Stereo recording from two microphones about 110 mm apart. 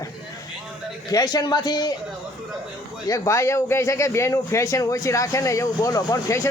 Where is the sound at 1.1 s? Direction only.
35° left (ahead or behind).